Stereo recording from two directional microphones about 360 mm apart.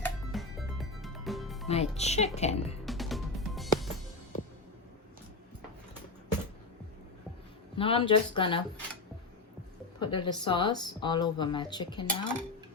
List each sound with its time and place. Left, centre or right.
0.0 s music: centre
1.6 s speech: centre
2.8 s music: centre
7.8 s speech: centre
10.0 s speech: centre